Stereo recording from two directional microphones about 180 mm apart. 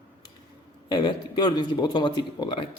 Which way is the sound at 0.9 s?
25° left (ahead or behind).